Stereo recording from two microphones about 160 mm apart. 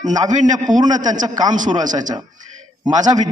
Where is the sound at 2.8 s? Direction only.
25° right (ahead or behind).